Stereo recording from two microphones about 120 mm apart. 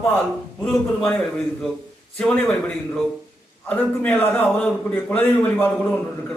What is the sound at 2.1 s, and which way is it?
A man's voice, 10° left (ahead or behind).